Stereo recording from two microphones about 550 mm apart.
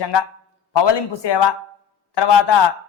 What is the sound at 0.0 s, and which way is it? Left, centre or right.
A man's voice, left.